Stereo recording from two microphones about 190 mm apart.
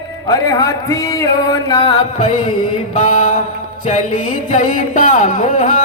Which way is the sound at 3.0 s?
40° left (ahead or behind).